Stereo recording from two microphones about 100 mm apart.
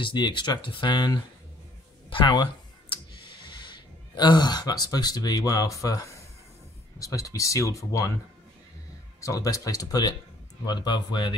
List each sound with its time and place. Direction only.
0.0 s speech: 50° left (ahead or behind)
2.0 s clicking: 55° left (ahead or behind)
3.7 s speech: 50° left (ahead or behind); by 8.1 s 30° left (ahead or behind)
9.2 s speech: 35° left (ahead or behind)